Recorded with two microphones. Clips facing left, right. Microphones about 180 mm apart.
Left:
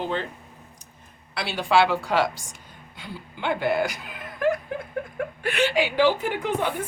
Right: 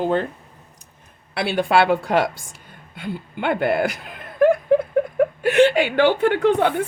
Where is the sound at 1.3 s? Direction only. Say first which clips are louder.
Right 4 dB; 55° right (ahead or behind).